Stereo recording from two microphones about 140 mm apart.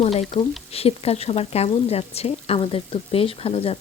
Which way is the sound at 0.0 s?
45° left (ahead or behind).